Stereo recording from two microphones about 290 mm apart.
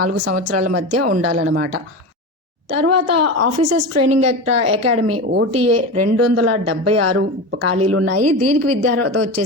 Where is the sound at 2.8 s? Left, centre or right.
Right.